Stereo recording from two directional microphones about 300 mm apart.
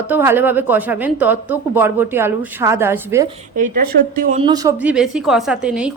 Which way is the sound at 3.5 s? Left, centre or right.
Right.